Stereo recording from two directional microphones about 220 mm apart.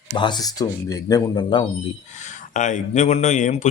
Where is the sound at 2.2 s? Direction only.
35° left (ahead or behind).